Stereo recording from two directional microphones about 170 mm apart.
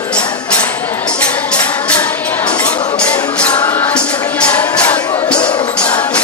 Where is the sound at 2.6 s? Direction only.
25° left (ahead or behind).